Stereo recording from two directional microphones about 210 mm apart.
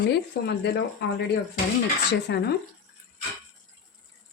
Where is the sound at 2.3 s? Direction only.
55° left (ahead or behind).